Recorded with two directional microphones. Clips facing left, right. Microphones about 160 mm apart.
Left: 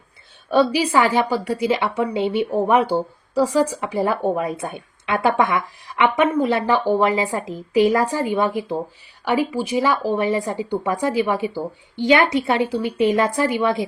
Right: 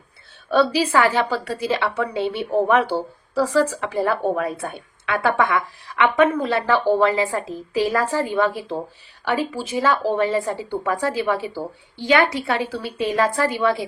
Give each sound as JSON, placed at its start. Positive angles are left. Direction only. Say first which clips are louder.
{"t": 0.5, "sound": "a woman's voice", "louder": "left 1 dB", "side_deg": 10}